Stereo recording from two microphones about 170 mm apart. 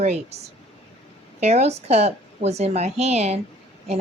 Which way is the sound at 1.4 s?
40° right (ahead or behind).